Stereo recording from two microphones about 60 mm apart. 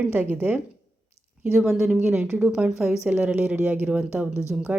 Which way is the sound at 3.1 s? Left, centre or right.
Right.